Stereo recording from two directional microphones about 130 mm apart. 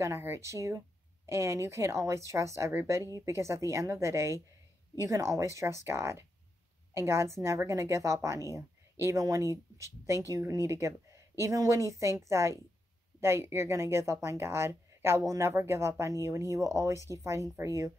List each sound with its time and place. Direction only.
0.0 s a woman's voice: 20° right (ahead or behind)